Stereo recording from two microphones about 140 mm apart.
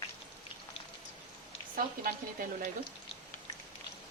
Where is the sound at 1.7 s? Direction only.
85° right.